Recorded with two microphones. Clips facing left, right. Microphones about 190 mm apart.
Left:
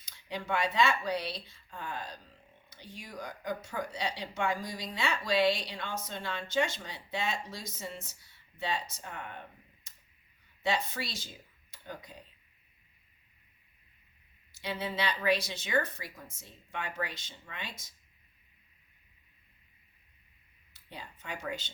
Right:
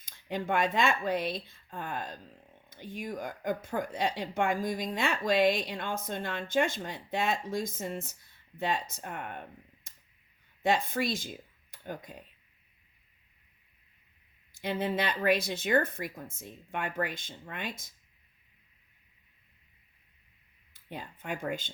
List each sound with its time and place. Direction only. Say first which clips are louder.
0.0 s a woman's voice: right 5 dB; 50° right (ahead or behind)
10.6 s a woman's voice: right 5 dB; 50° right (ahead or behind)
11.7 s a sound: right 5 dB; 50° right (ahead or behind)
14.6 s a woman's voice: right 4 dB; 50° right (ahead or behind)
20.9 s a woman's voice: right 5 dB; 50° right (ahead or behind)